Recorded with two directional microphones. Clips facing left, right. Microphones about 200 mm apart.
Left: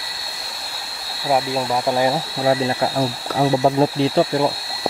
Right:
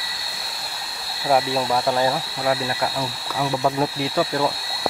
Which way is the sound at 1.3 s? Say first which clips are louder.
Even; 5° left (ahead or behind).